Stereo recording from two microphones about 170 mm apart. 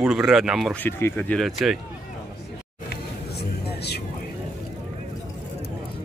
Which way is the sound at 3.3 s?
75° left (ahead or behind).